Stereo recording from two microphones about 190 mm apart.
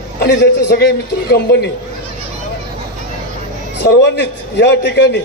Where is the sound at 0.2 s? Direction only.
60° left (ahead or behind).